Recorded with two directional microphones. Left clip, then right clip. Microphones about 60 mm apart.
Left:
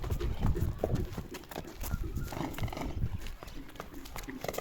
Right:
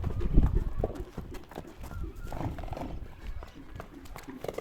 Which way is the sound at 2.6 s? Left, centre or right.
Right.